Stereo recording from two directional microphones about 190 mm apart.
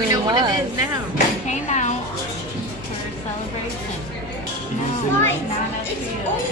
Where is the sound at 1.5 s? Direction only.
40° left (ahead or behind).